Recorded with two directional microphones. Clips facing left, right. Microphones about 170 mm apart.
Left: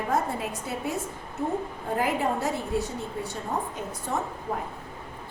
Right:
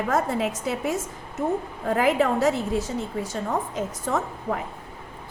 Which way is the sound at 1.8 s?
90° right.